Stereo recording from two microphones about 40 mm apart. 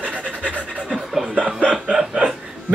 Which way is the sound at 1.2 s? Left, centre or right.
Right.